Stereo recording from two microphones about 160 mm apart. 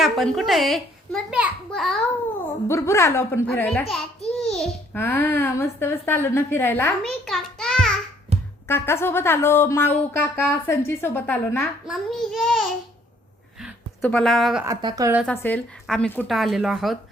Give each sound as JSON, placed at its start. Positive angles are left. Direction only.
{"t": 0.0, "sound": "a child's voice", "side_deg": 0}
{"t": 2.6, "sound": "speech", "side_deg": 15}
{"t": 4.9, "sound": "speech", "side_deg": 15}
{"t": 7.0, "sound": "a sound", "side_deg": 0}
{"t": 8.3, "sound": "a sound", "side_deg": -40}
{"t": 8.6, "sound": "speech", "side_deg": 15}
{"t": 11.9, "sound": "a child's voice", "side_deg": 0}
{"t": 14.6, "sound": "a woman's voice", "side_deg": -25}
{"t": 15.3, "sound": "a child's voice", "side_deg": 10}